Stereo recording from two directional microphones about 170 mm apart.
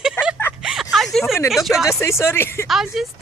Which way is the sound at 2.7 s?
Centre (ahead or behind).